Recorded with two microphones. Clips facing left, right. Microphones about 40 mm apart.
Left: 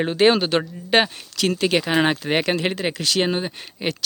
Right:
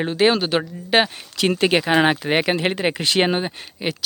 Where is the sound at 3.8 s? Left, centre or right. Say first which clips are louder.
Even; centre.